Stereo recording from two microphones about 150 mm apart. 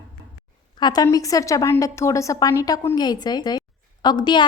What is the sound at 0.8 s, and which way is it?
A woman's voice, 30° left (ahead or behind).